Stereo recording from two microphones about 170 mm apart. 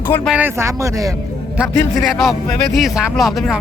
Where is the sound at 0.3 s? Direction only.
10° right (ahead or behind).